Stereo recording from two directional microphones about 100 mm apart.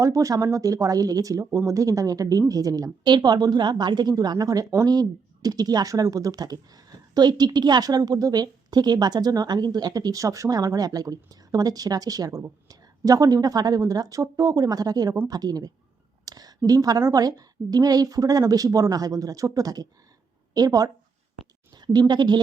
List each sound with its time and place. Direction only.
0.0 s a woman's voice: 35° right (ahead or behind)
16.2 s a sound: 40° right (ahead or behind)
16.6 s speech: 40° right (ahead or behind)